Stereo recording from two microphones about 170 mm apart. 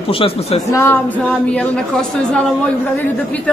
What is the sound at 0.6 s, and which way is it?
A woman's voice, 15° left (ahead or behind).